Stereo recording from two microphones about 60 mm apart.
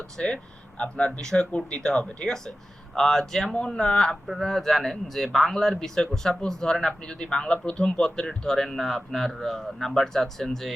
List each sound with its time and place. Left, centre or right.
0.2 s a man's voice: centre